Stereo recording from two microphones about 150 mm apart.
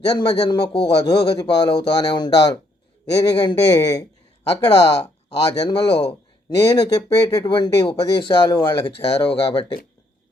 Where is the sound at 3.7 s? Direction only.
25° left (ahead or behind).